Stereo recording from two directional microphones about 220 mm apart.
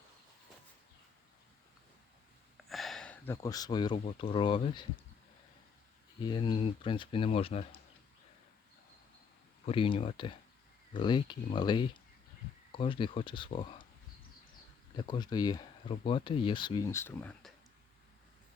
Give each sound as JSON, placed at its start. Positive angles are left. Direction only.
{"t": 2.6, "sound": "a sound", "side_deg": 0}
{"t": 4.0, "sound": "speech", "side_deg": 25}
{"t": 6.2, "sound": "speech", "side_deg": 20}
{"t": 9.6, "sound": "speech", "side_deg": 25}
{"t": 14.9, "sound": "speech", "side_deg": 20}